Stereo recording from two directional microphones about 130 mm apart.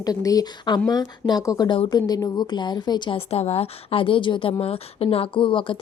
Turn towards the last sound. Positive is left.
turn(degrees=40)  # may be behind; listen again after turning